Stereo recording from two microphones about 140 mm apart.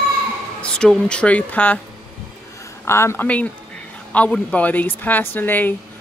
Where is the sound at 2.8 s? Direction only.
20° left (ahead or behind).